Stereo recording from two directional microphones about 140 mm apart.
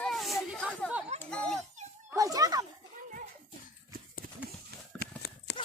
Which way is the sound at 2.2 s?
25° right (ahead or behind).